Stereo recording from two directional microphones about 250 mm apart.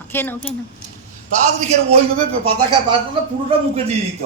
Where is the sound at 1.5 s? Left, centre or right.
Right.